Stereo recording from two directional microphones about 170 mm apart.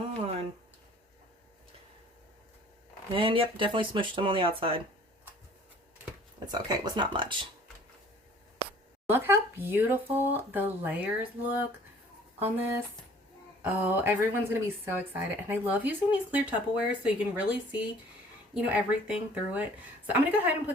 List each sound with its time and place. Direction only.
3.1 s speech: 30° right (ahead or behind)
6.5 s speech: 25° right (ahead or behind)
9.0 s a woman's voice: 15° right (ahead or behind)
18.5 s a woman's voice: 5° right (ahead or behind)